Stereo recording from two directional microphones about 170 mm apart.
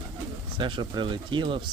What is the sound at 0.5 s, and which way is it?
Speech, 30° right (ahead or behind).